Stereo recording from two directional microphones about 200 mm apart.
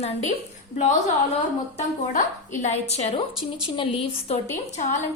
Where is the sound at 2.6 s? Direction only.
35° left (ahead or behind).